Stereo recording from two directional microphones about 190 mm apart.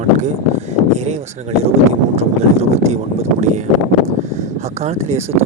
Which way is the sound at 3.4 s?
40° right (ahead or behind).